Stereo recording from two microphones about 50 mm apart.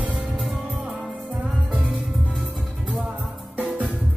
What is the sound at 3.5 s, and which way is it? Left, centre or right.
Music, right.